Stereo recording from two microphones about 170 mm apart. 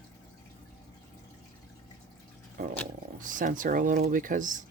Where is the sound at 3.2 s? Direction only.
50° right (ahead or behind).